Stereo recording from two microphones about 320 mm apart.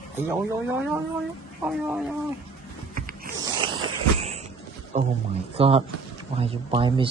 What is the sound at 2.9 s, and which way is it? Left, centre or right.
Zipper, right.